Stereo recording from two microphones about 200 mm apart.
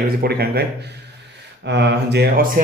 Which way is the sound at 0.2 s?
50° right (ahead or behind).